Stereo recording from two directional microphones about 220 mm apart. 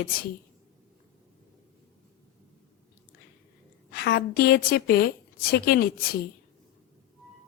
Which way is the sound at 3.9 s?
45° left (ahead or behind).